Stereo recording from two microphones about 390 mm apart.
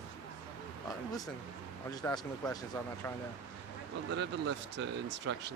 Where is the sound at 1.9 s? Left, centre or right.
Centre.